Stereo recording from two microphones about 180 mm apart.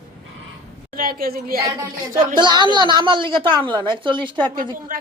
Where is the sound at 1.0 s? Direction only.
55° right (ahead or behind).